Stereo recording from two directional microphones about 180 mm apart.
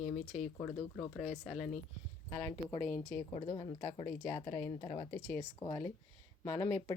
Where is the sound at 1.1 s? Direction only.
Centre (ahead or behind).